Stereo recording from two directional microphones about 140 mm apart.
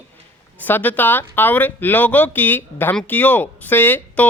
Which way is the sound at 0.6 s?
15° left (ahead or behind).